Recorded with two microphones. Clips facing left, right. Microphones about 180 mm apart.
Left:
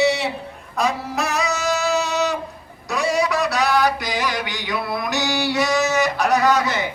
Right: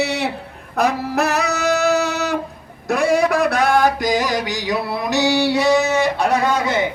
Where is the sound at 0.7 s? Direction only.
65° right (ahead or behind).